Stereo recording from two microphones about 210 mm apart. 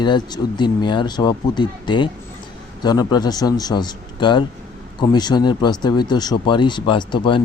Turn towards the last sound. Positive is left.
turn(degrees=25)  # may be behind; listen again after turning